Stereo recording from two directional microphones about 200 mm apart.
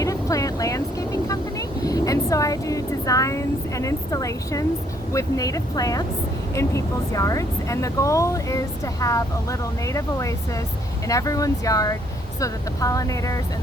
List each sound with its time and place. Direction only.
0.0 s vehicle: 15° left (ahead or behind)
5.1 s speech: 15° left (ahead or behind)